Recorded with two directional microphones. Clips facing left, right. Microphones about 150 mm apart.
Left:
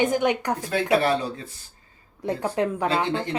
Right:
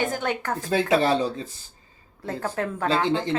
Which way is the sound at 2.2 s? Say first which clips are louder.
Left 4 dB; 15° left (ahead or behind).